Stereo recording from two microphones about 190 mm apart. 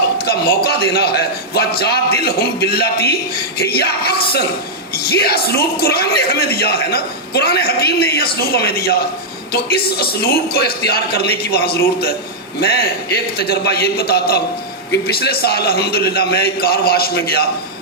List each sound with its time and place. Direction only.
0.3 s speech: 55° left (ahead or behind)
5.1 s speech: 55° left (ahead or behind)